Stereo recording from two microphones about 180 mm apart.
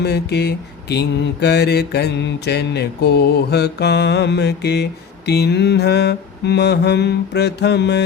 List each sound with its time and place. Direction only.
0.0 s mantra: 65° left (ahead or behind)